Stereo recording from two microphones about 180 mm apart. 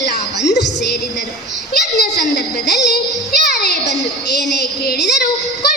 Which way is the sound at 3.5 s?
65° left (ahead or behind).